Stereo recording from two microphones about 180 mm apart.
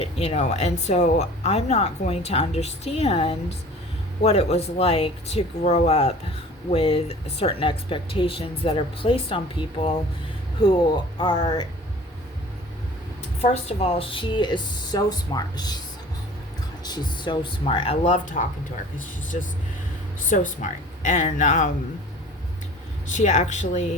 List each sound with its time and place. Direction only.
0.0 s speech: 35° left (ahead or behind)
13.4 s speech: 35° left (ahead or behind)
16.8 s speech: 25° left (ahead or behind); by 21.7 s 45° left (ahead or behind)
23.1 s speech: 40° left (ahead or behind)